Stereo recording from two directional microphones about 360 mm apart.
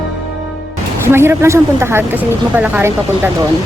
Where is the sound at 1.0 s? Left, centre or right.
Centre.